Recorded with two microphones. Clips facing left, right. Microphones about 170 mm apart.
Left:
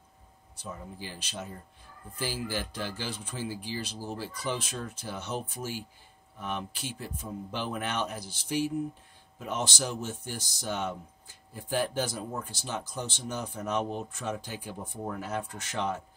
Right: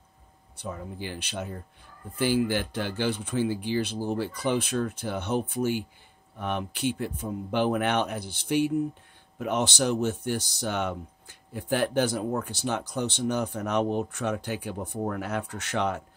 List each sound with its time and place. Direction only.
0.6 s speech: 65° right (ahead or behind)